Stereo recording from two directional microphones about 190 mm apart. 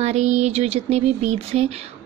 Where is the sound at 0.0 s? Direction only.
35° right (ahead or behind).